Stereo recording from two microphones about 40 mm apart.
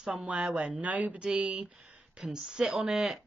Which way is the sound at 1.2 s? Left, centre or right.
Right.